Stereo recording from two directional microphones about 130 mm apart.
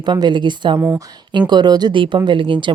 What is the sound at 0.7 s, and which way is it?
Speech, 15° right (ahead or behind).